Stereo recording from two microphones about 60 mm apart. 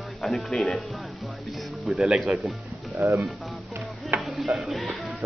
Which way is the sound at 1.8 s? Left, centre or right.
Centre.